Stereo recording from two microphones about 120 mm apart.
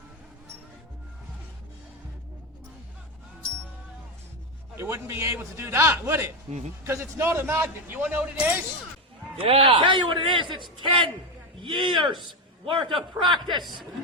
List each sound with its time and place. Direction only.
4.8 s a man's voice: 20° right (ahead or behind)
9.4 s a man's voice: 50° right (ahead or behind)